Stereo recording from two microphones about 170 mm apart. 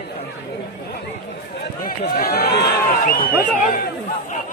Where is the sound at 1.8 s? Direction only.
60° left (ahead or behind).